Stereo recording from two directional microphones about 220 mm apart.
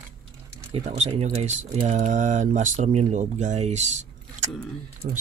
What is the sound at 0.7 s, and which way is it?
Speech, 30° right (ahead or behind).